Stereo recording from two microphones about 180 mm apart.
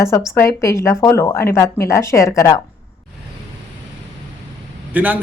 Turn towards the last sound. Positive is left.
turn(degrees=-10)  # may be behind; listen again after turning